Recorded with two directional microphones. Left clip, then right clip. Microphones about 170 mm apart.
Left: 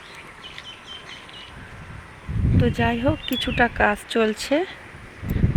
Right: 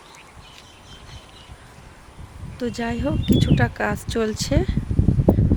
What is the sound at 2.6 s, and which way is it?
Speech, 10° right (ahead or behind).